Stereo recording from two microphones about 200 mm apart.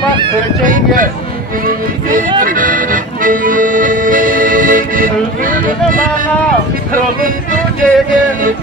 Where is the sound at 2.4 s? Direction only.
45° right (ahead or behind).